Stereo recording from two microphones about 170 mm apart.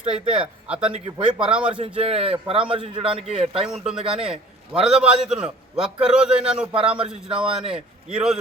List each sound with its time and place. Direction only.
0.3 s a man's voice: 5° right (ahead or behind)
1.7 s a man's voice: 35° right (ahead or behind)
3.7 s a man's voice: 5° right (ahead or behind)